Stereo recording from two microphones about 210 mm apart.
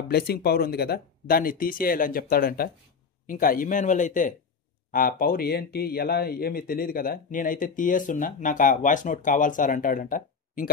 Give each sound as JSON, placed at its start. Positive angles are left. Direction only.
{"t": 0.1, "sound": "speech", "side_deg": 50}